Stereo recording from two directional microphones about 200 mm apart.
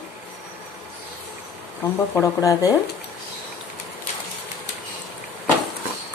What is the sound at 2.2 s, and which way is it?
Speech, 15° left (ahead or behind).